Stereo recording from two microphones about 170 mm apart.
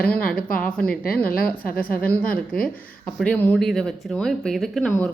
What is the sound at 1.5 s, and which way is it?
Speech, 60° left (ahead or behind).